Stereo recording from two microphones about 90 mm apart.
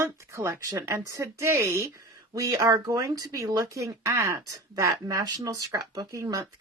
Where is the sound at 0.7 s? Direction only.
35° right (ahead or behind).